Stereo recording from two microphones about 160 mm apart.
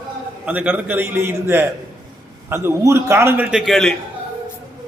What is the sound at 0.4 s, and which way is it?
A man's voice, 10° right (ahead or behind).